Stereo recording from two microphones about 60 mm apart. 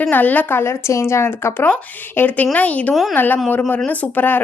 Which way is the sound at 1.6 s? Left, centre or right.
Left.